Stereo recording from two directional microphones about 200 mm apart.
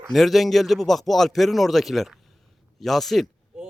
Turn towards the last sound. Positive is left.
turn(degrees=0)  # may be behind; listen again after turning